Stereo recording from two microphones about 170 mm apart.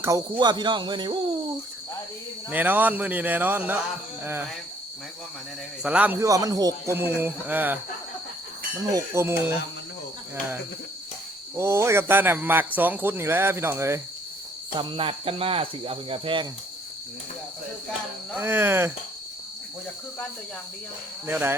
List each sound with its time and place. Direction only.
0.0 s speech: 20° right (ahead or behind)
2.5 s speech: 10° right (ahead or behind)
5.8 s speech: 5° right (ahead or behind)
6.1 s speech: 20° right (ahead or behind)
8.8 s speech: 15° right (ahead or behind)
11.5 s speech: 15° right (ahead or behind)
14.8 s cricket: 30° right (ahead or behind)
18.3 s speech: 15° right (ahead or behind)
21.2 s speech: 10° right (ahead or behind)